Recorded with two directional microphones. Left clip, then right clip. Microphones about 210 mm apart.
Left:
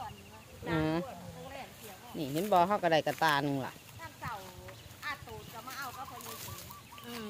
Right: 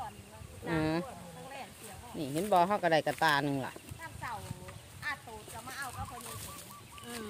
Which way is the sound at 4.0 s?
45° right (ahead or behind).